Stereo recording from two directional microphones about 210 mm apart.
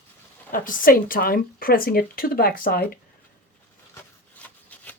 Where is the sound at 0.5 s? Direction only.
40° left (ahead or behind).